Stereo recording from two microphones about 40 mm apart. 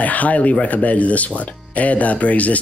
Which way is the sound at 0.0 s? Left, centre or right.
Left.